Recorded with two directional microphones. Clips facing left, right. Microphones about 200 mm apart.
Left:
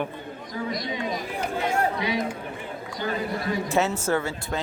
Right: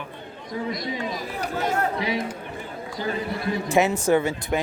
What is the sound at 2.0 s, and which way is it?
Speech, 25° right (ahead or behind).